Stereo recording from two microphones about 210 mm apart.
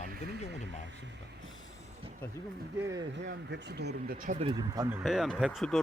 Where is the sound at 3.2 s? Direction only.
55° right (ahead or behind); by 5.0 s 15° right (ahead or behind).